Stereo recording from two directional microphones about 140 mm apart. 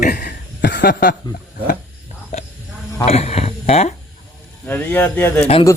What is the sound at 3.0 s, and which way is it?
Speech, 45° left (ahead or behind).